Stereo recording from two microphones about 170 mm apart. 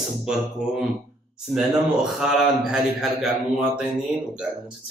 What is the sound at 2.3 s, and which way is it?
Speech, centre (ahead or behind).